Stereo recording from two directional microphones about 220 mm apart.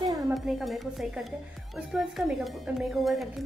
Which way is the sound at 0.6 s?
Centre (ahead or behind).